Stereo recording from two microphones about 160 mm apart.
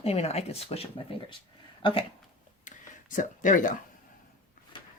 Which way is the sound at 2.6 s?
55° left (ahead or behind).